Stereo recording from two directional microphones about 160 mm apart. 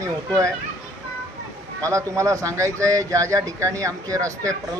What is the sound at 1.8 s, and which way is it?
A man's voice, 20° right (ahead or behind).